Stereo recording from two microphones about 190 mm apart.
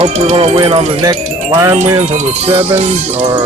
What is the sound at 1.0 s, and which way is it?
Speech, 20° right (ahead or behind).